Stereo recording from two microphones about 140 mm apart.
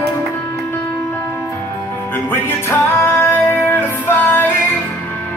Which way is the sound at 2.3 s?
15° left (ahead or behind).